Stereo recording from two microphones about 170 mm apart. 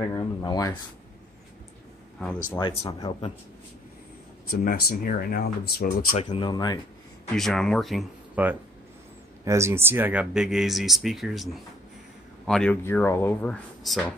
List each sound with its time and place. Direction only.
0.4 s speech: 20° left (ahead or behind)
2.6 s speech: 20° left (ahead or behind)
4.5 s speech: 60° left (ahead or behind)
6.1 s speech: 30° left (ahead or behind)
7.3 s speech: 5° left (ahead or behind)